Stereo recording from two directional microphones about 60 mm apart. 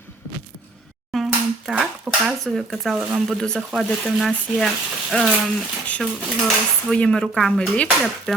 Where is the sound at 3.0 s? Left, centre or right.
Centre.